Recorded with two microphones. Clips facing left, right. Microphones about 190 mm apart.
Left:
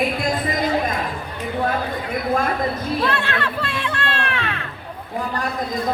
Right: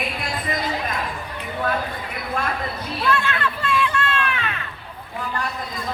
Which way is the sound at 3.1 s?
65° left (ahead or behind).